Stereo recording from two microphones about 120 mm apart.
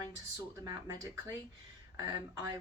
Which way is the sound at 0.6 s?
35° right (ahead or behind).